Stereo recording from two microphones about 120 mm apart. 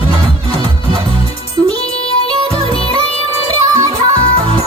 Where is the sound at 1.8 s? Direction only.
50° left (ahead or behind).